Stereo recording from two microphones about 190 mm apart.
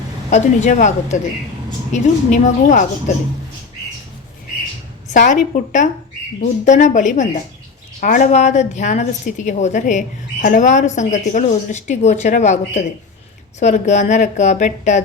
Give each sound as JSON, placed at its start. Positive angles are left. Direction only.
{"t": 0.3, "sound": "a woman's voice", "side_deg": 40}
{"t": 5.1, "sound": "a woman's voice", "side_deg": 40}